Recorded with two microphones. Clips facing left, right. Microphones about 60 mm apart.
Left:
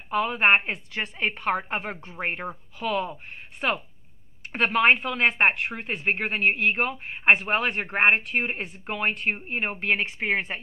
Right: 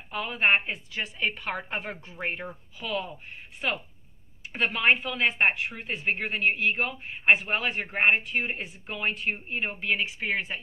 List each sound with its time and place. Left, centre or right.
0.1 s speech: left
1.2 s a woman's voice: left
4.5 s speech: left
9.5 s a woman's voice: left